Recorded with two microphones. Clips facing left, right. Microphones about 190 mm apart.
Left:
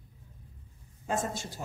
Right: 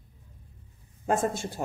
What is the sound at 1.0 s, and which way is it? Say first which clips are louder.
Speech: right 6 dB; 55° right (ahead or behind).